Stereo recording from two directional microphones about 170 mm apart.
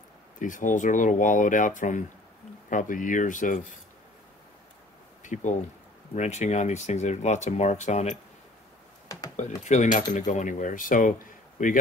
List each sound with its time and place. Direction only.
0.4 s speech: 50° left (ahead or behind)
5.2 s speech: 45° left (ahead or behind)
9.7 s speech: 45° left (ahead or behind)